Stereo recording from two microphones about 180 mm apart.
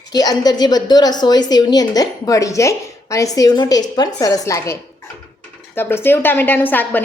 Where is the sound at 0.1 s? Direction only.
20° left (ahead or behind).